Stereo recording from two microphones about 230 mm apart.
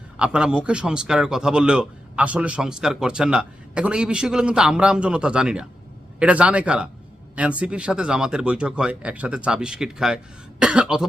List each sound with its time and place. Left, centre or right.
0.2 s a man's voice: centre